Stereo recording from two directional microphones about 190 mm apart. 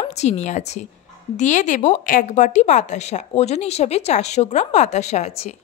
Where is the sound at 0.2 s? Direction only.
35° left (ahead or behind).